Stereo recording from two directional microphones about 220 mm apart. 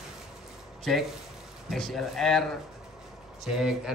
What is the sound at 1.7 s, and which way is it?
Speech, centre (ahead or behind).